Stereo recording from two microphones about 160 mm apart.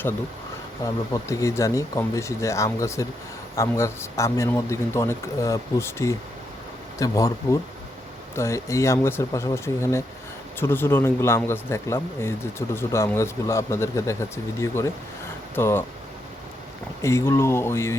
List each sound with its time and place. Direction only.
1.1 s speech: 20° left (ahead or behind)
17.0 s speech: 15° left (ahead or behind)